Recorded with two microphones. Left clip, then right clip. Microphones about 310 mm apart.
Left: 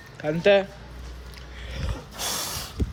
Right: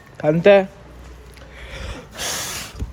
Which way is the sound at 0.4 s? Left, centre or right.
Centre.